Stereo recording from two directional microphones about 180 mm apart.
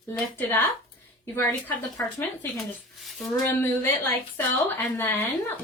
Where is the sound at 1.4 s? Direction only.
15° left (ahead or behind).